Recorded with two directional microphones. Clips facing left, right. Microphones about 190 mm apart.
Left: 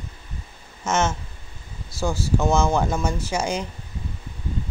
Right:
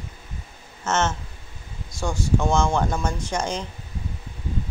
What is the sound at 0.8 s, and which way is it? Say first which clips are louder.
A man's voice: left 1 dB; 10° left (ahead or behind).